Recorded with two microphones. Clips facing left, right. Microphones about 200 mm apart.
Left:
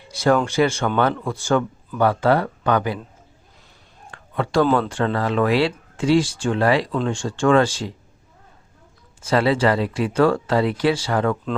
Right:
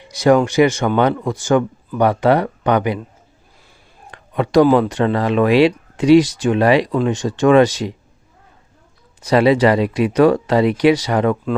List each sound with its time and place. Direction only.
0.0 s speech: 15° right (ahead or behind)
4.1 s speech: 15° right (ahead or behind)
9.2 s speech: 15° right (ahead or behind)